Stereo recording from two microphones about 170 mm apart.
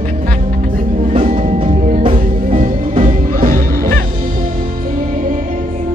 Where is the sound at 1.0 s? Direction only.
40° right (ahead or behind).